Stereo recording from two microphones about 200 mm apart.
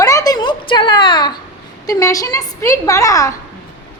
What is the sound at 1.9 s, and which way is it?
A woman's voice, 15° left (ahead or behind).